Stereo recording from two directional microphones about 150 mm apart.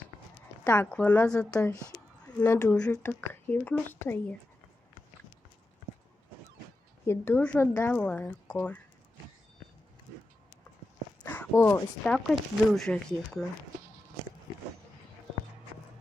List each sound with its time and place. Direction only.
0.6 s speech: 10° left (ahead or behind)
2.7 s speech: 5° left (ahead or behind)
7.1 s speech: 10° left (ahead or behind)
11.3 s speech: 15° left (ahead or behind)